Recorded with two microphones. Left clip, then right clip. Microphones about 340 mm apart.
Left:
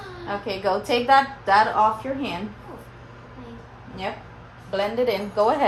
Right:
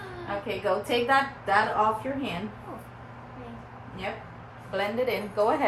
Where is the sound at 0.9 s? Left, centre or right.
Left.